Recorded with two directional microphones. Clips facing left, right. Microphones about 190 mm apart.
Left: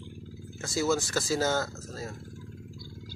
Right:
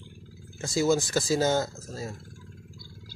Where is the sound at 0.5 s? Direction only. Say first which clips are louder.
Right 3 dB; 15° right (ahead or behind).